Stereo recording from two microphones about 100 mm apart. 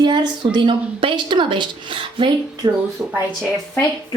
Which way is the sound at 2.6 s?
45° right (ahead or behind).